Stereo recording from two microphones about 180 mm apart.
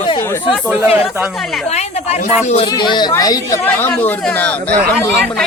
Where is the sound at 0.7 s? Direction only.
10° right (ahead or behind).